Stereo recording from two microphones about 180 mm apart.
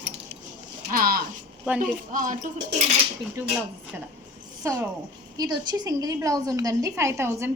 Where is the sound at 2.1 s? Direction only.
45° right (ahead or behind).